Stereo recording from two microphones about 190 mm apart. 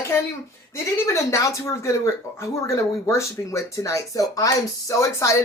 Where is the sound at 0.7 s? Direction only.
15° left (ahead or behind).